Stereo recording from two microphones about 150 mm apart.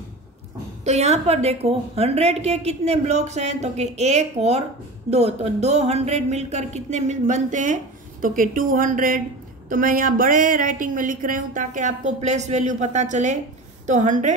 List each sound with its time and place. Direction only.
0.8 s a woman's voice: 45° right (ahead or behind)